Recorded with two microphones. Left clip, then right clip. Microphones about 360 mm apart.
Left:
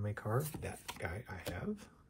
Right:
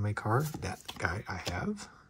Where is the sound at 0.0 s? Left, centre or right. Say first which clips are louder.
Right 7 dB; centre.